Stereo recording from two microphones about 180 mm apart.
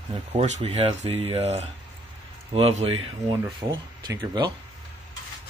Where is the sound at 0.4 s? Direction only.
35° right (ahead or behind).